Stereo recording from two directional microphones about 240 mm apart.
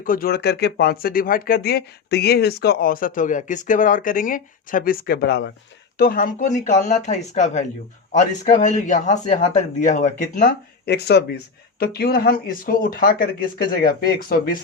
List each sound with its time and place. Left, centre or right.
0.0 s speech: left